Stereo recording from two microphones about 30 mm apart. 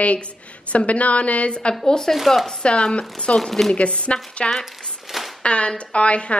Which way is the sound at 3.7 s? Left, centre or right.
Left.